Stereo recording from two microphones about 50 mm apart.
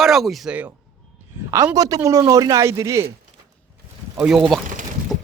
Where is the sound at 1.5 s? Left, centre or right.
Right.